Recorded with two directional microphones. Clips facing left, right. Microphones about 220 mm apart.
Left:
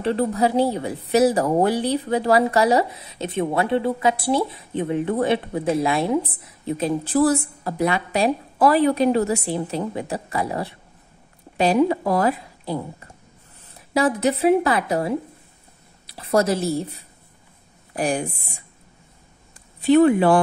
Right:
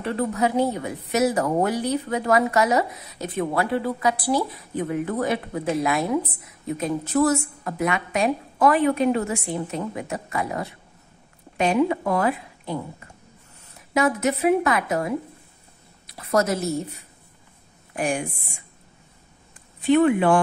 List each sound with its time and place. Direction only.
0.0 s a woman's voice: 30° left (ahead or behind)
13.7 s a woman's voice: 35° left (ahead or behind)
17.9 s speech: 35° left (ahead or behind)
19.9 s speech: 35° left (ahead or behind)